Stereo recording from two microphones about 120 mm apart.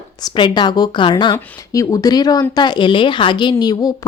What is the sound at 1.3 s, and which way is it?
A woman's voice, 30° left (ahead or behind).